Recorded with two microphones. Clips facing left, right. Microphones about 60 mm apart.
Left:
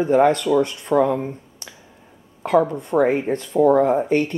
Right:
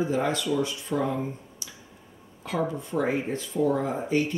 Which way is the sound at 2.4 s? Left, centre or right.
Left.